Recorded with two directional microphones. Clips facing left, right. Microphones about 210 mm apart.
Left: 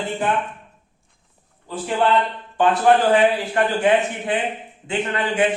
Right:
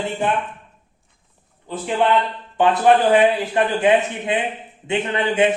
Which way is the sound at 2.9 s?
20° right (ahead or behind).